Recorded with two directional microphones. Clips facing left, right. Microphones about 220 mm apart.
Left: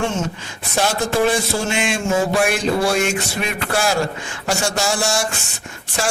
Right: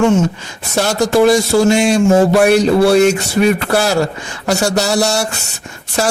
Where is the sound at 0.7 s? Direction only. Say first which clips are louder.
Right 6 dB; 40° right (ahead or behind).